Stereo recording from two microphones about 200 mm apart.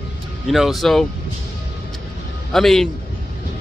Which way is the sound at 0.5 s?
Centre (ahead or behind).